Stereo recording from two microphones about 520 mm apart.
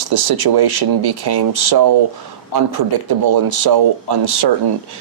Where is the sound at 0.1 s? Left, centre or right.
Right.